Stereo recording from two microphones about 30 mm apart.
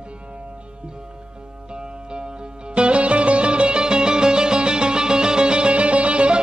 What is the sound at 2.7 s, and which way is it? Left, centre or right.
Music, right.